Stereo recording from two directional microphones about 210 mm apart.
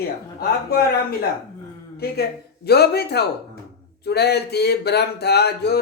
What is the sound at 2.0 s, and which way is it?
Speech, 45° left (ahead or behind).